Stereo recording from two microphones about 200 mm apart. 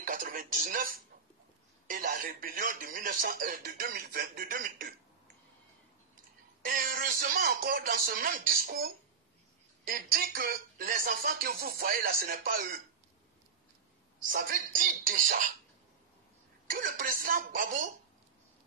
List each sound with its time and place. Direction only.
0.0 s speech: 45° right (ahead or behind)
6.6 s speech: 45° right (ahead or behind)
14.2 s speech: 40° right (ahead or behind)
16.6 s speech: 45° right (ahead or behind)